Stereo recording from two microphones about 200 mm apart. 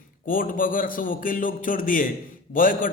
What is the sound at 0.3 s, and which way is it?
A man's voice, 45° left (ahead or behind).